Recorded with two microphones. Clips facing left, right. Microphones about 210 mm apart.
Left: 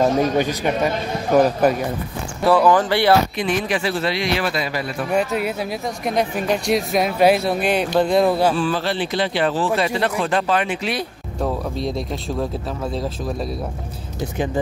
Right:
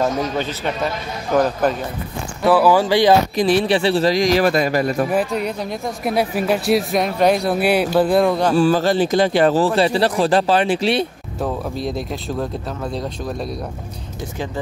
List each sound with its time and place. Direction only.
0.0 s a man's voice: 15° left (ahead or behind)
2.4 s speech: 5° right (ahead or behind)
3.3 s a man's voice: 35° right (ahead or behind)
5.1 s speech: 5° left (ahead or behind)
6.1 s speech: 5° right (ahead or behind)
8.5 s a man's voice: 40° right (ahead or behind)
11.3 s speech: centre (ahead or behind)